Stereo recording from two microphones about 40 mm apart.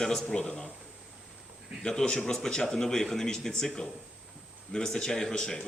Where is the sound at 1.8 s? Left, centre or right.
Centre.